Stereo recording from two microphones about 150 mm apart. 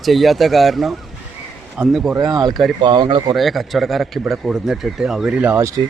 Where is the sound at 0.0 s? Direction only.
Centre (ahead or behind).